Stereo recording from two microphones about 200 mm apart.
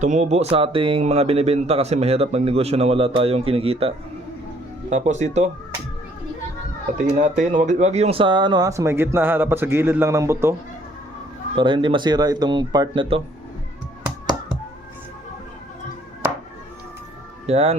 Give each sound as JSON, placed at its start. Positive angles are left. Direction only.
{"t": 0.0, "sound": "speech", "side_deg": -35}
{"t": 7.2, "sound": "speech", "side_deg": -40}
{"t": 11.5, "sound": "speech", "side_deg": -25}
{"t": 17.4, "sound": "speech", "side_deg": -30}